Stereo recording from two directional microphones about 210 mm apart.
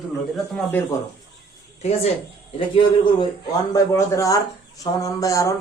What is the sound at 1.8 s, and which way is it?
A man's voice, 30° left (ahead or behind).